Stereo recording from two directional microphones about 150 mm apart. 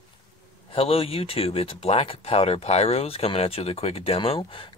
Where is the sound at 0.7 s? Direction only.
40° left (ahead or behind).